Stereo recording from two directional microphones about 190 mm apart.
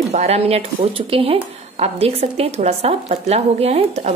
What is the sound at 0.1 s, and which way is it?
A woman's voice, 35° right (ahead or behind).